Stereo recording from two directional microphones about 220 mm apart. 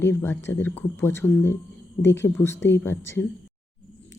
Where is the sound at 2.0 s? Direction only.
55° left (ahead or behind).